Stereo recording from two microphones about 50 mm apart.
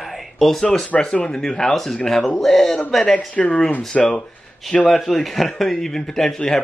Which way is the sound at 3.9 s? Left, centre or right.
Centre.